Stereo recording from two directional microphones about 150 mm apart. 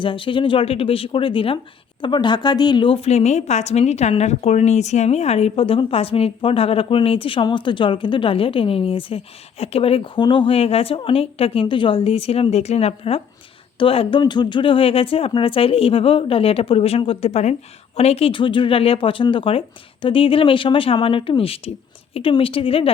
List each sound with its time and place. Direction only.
0.0 s a woman's voice: 35° left (ahead or behind)